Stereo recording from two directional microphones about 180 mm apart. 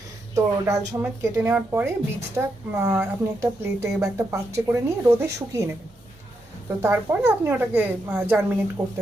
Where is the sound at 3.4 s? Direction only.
15° right (ahead or behind).